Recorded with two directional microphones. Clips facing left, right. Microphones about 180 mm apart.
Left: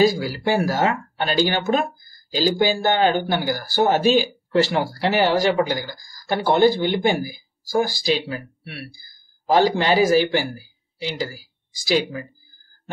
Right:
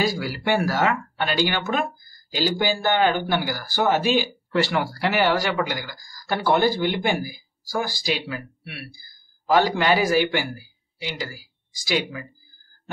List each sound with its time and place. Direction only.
0.0 s speech: 30° left (ahead or behind)